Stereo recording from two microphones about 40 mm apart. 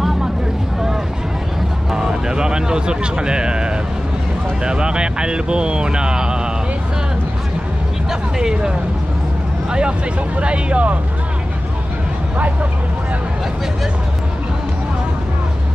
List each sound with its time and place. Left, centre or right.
1.9 s speech: centre
8.1 s speech: centre; by 11.0 s right